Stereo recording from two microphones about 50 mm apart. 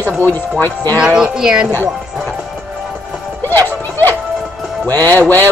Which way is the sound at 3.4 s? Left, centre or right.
Left.